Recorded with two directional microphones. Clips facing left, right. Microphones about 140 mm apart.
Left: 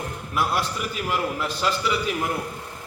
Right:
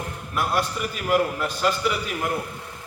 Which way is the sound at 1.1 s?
45° right (ahead or behind).